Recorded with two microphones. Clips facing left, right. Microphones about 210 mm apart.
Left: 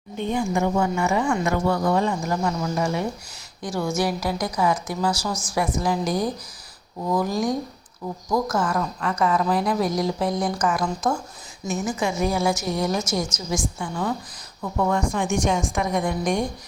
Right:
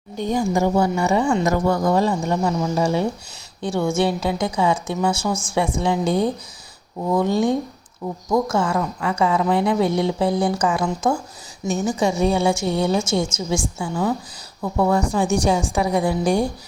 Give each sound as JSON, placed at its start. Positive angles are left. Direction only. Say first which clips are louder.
{"t": 0.2, "sound": "a woman's voice", "louder": "right 3 dB", "side_deg": -40}
{"t": 1.5, "sound": "a woman's voice", "louder": "right 3 dB", "side_deg": -45}
{"t": 11.6, "sound": "a woman's voice", "louder": "right 5 dB", "side_deg": -30}